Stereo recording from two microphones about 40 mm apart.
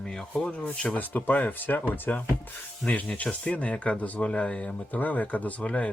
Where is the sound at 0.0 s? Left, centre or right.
Centre.